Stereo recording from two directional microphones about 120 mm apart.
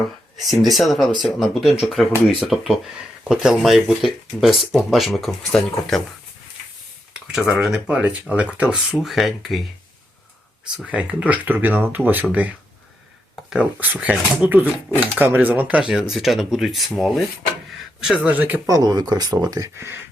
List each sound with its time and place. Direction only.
0.3 s speech: centre (ahead or behind)
7.1 s speech: 5° right (ahead or behind)
10.8 s speech: 10° right (ahead or behind)
13.5 s speech: 15° right (ahead or behind)
18.7 s speech: 35° right (ahead or behind)